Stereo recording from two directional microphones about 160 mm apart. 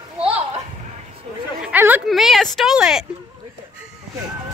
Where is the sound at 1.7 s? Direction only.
10° right (ahead or behind).